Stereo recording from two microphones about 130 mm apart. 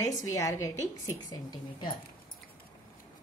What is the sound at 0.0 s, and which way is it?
A woman's voice, 25° left (ahead or behind).